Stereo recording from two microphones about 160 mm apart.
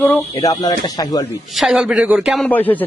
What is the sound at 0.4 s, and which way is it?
Speech, 25° left (ahead or behind).